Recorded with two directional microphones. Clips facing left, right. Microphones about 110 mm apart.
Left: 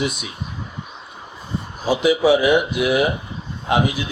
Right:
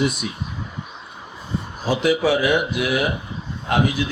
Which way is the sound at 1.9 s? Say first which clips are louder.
Left 3 dB; 15° left (ahead or behind).